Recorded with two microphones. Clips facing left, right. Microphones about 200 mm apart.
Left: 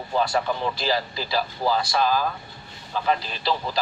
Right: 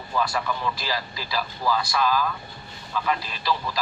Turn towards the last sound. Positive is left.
turn(degrees=30)  # may be behind; listen again after turning